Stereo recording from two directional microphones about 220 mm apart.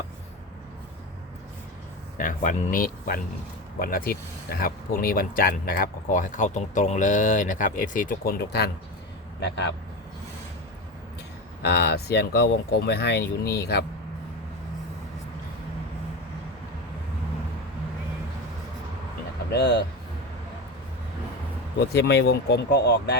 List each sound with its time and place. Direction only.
2.1 s speech: 35° left (ahead or behind)
11.6 s speech: 50° left (ahead or behind)
19.5 s speech: 50° left (ahead or behind)
21.9 s speech: 50° left (ahead or behind)